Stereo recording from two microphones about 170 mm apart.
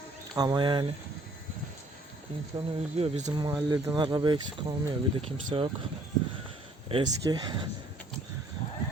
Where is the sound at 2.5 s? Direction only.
40° right (ahead or behind).